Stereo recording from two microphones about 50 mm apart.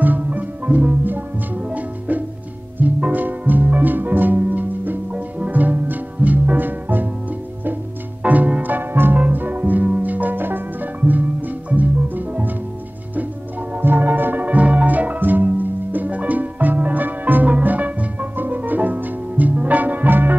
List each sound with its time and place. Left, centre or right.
0.0 s music: right
8.2 s music: right
13.7 s music: right